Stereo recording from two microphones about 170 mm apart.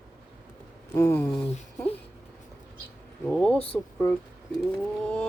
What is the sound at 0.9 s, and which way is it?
Speech, 15° left (ahead or behind).